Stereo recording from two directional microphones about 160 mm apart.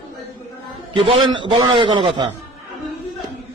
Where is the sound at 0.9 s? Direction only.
30° right (ahead or behind).